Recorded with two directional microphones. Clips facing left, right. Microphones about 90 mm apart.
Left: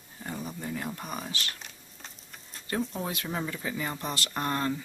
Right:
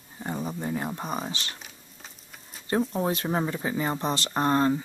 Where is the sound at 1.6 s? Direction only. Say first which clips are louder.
Right 1 dB; 5° right (ahead or behind).